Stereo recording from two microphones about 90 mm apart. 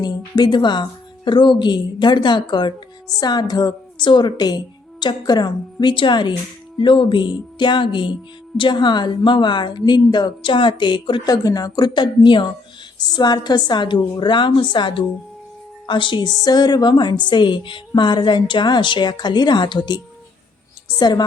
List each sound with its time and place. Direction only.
0.0 s a woman's voice: 55° left (ahead or behind)
11.3 s a woman's voice: 45° left (ahead or behind); by 16.3 s 60° left (ahead or behind)
16.4 s a woman's voice: 50° left (ahead or behind)